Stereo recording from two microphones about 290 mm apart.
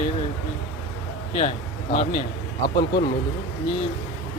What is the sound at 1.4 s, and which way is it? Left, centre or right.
Speech, left.